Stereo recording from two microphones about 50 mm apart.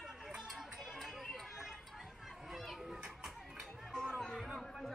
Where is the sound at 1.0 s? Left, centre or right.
Centre.